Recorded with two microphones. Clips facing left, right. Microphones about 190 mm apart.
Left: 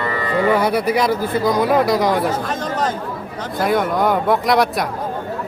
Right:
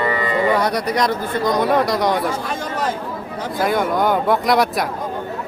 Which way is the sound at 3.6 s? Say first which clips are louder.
Left 1 dB; centre (ahead or behind).